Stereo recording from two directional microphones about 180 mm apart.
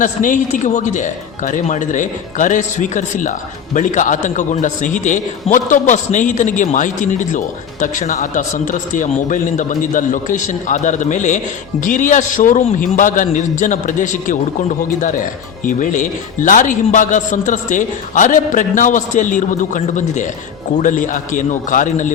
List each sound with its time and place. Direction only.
0.0 s a man's voice: 45° left (ahead or behind)